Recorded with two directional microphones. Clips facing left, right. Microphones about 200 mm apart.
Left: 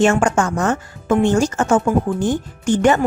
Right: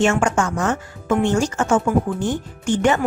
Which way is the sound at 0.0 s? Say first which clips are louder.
Left 3 dB; 35° left (ahead or behind).